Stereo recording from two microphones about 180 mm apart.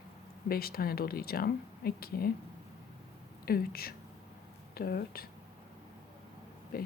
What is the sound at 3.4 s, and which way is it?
Speech, 55° left (ahead or behind).